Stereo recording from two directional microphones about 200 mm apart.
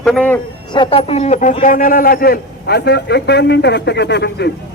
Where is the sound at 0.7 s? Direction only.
25° left (ahead or behind); by 4.5 s 55° left (ahead or behind).